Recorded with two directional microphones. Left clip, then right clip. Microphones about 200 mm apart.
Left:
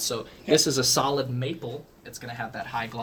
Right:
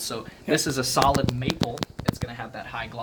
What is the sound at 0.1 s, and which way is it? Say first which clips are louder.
Speech: left 2 dB; 15° right (ahead or behind).